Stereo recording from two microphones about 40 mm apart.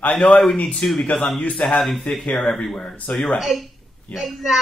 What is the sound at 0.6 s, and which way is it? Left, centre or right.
Speech, left.